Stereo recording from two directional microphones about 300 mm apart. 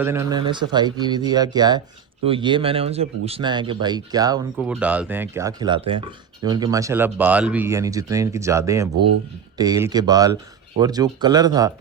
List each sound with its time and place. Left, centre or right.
0.0 s speech: centre